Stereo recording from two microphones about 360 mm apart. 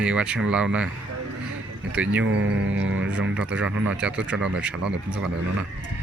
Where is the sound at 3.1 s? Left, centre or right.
Centre.